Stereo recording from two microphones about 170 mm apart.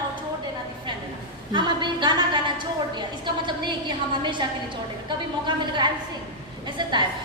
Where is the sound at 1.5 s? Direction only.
25° right (ahead or behind).